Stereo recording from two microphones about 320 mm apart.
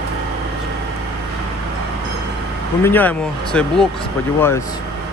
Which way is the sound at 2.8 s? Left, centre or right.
Centre.